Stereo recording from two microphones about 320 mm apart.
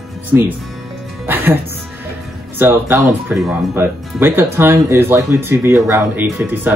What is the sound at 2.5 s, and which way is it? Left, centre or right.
Speech, centre.